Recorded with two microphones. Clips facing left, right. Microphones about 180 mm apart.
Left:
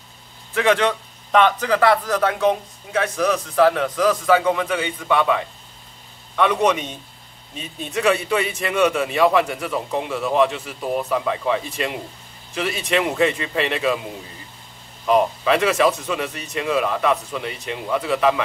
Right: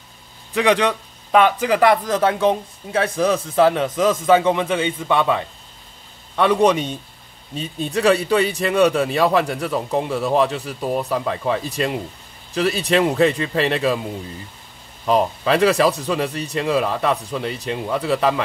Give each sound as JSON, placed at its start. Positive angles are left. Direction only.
{"t": 0.5, "sound": "a man's voice", "side_deg": -15}
{"t": 15.0, "sound": "a man's voice", "side_deg": -35}